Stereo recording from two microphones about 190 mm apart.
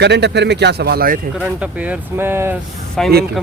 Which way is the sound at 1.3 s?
5° right (ahead or behind).